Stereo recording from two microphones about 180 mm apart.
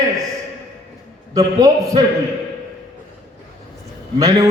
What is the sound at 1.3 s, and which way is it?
Speech, 20° right (ahead or behind).